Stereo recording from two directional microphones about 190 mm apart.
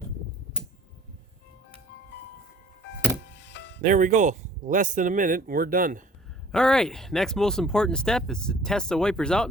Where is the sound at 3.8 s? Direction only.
40° right (ahead or behind).